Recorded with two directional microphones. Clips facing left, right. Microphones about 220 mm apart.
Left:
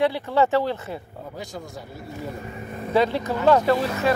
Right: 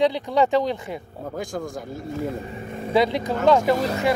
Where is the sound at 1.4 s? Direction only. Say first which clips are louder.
Right 7 dB; 50° right (ahead or behind).